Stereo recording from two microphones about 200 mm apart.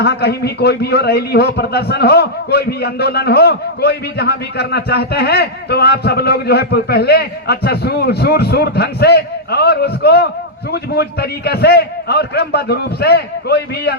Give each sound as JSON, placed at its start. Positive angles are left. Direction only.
{"t": 0.0, "sound": "a man's voice", "side_deg": 55}